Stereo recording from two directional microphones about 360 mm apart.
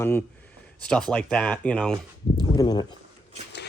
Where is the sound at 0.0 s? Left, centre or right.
Centre.